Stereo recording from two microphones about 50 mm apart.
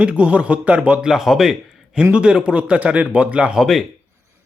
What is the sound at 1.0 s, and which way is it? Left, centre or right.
Speech, centre.